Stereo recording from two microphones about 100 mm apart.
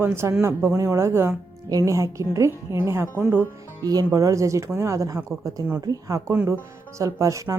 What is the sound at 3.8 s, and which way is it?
A woman's voice, 40° right (ahead or behind).